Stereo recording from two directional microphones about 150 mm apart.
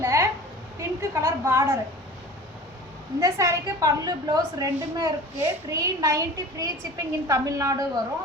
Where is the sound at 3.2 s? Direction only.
20° right (ahead or behind).